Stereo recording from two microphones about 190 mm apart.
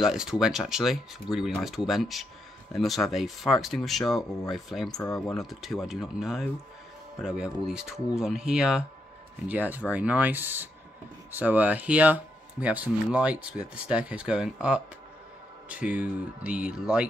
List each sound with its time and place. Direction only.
0.0 s speech: 5° right (ahead or behind)
4.9 s speech: 20° left (ahead or behind)
5.2 s speech: centre (ahead or behind)